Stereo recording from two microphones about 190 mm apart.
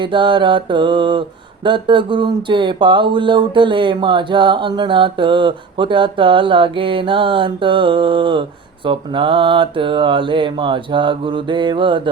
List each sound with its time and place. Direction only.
0.0 s speech: 25° right (ahead or behind)